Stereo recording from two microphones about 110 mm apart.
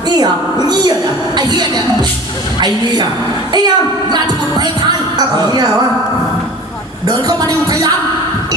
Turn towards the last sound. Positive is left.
turn(degrees=-35)  # may be behind; listen again after turning